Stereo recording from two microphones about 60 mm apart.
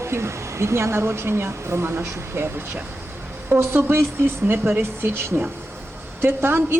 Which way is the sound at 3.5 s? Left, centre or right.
Right.